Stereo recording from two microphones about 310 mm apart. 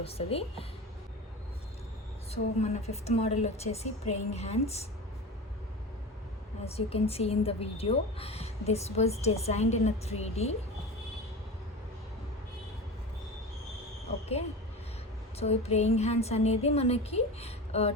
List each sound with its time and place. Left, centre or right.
0.0 s speech: centre
2.3 s speech: left
6.7 s speech: centre
15.4 s speech: left